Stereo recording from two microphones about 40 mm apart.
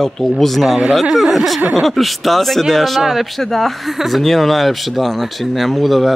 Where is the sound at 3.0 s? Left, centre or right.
Centre.